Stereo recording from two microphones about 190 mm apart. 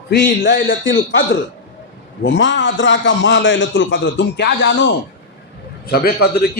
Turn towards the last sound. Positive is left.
turn(degrees=55)  # may be behind; listen again after turning